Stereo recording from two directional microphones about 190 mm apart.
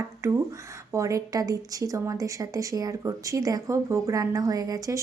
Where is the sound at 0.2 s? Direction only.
15° right (ahead or behind).